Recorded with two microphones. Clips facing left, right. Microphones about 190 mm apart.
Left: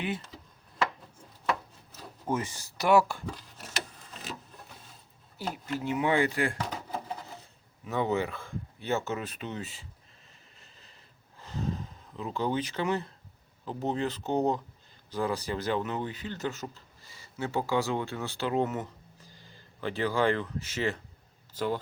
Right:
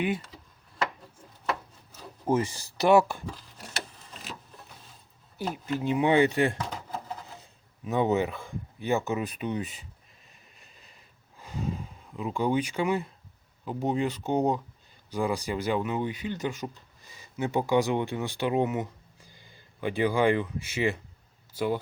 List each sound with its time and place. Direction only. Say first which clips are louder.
2.2 s speech: right 6 dB; 30° right (ahead or behind)
5.6 s speech: right 4 dB; 20° right (ahead or behind)
7.9 s speech: right 4 dB; 20° right (ahead or behind)
10.6 s vehicle: right 1 dB; 15° right (ahead or behind)
11.3 s a sound: right 1 dB; 10° right (ahead or behind)
13.7 s speech: right 3 dB; 10° right (ahead or behind)